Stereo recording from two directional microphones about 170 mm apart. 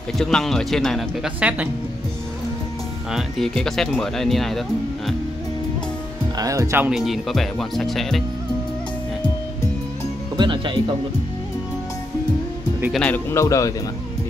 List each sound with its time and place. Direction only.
0.2 s speech: 5° left (ahead or behind)
3.1 s speech: centre (ahead or behind)
6.3 s speech: 20° right (ahead or behind)
6.9 s speech: centre (ahead or behind)
10.3 s music: 30° right (ahead or behind)
12.9 s speech: 10° left (ahead or behind)